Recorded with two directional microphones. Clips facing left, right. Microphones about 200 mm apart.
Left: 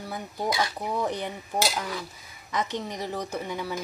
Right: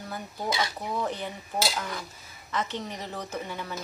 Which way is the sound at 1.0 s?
15° left (ahead or behind).